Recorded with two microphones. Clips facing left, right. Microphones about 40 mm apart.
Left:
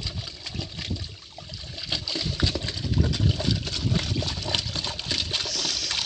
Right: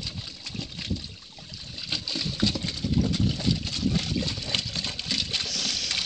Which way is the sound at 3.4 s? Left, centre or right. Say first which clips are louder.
Right 1 dB; left.